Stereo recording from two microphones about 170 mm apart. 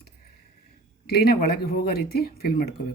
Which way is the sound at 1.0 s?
65° left (ahead or behind).